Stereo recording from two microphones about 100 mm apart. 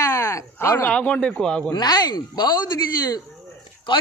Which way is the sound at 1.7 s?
45° left (ahead or behind).